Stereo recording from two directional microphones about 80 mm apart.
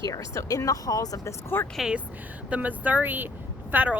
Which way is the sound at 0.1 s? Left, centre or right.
Left.